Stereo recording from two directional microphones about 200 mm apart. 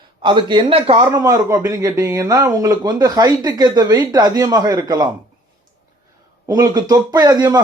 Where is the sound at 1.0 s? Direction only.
20° right (ahead or behind).